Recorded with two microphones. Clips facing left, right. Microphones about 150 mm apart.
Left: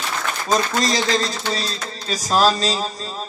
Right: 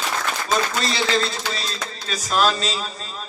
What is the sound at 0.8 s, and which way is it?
A man's voice, 40° left (ahead or behind).